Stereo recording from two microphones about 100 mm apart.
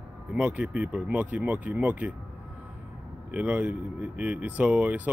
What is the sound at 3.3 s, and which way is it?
Speech, 15° right (ahead or behind).